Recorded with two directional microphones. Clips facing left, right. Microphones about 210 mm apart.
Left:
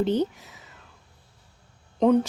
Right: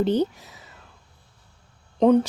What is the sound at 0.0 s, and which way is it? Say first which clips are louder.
Speech: right 2 dB; 35° right (ahead or behind).